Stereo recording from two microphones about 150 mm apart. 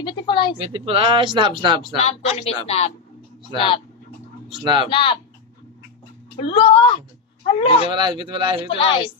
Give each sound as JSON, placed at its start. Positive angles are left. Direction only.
{"t": 0.0, "sound": "a sound", "side_deg": 35}
{"t": 0.6, "sound": "speech", "side_deg": -35}
{"t": 2.0, "sound": "a woman's voice", "side_deg": 45}
{"t": 4.5, "sound": "speech", "side_deg": -30}
{"t": 4.8, "sound": "speech", "side_deg": 35}
{"t": 6.4, "sound": "speech", "side_deg": 35}
{"t": 7.9, "sound": "speech", "side_deg": -30}
{"t": 8.7, "sound": "speech", "side_deg": 35}